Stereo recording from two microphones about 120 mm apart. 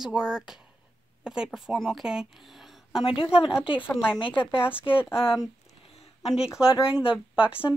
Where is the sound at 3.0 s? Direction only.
50° left (ahead or behind).